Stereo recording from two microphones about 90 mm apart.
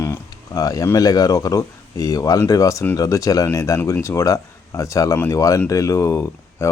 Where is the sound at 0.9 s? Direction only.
45° left (ahead or behind).